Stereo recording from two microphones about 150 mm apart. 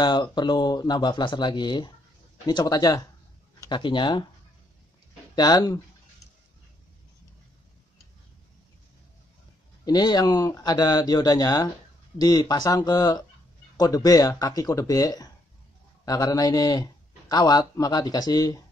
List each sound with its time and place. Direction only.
0.0 s speech: 30° left (ahead or behind)
5.3 s speech: 25° left (ahead or behind)
9.8 s speech: 30° left (ahead or behind)